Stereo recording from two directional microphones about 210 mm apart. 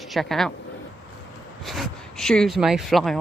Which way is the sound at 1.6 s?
Centre (ahead or behind).